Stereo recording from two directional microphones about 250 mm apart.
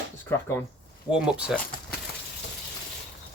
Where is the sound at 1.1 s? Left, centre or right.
Centre.